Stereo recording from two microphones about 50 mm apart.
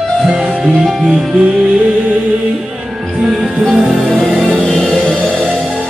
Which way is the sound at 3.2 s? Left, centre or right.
Centre.